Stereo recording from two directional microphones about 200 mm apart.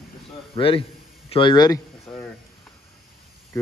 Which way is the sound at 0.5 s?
30° left (ahead or behind).